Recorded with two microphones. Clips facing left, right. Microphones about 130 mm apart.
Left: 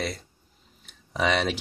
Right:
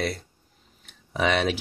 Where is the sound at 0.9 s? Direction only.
Centre (ahead or behind).